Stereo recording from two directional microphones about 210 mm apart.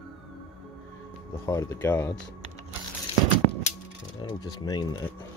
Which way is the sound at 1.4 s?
15° left (ahead or behind).